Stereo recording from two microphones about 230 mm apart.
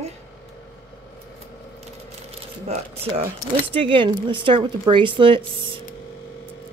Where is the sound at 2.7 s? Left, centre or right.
Right.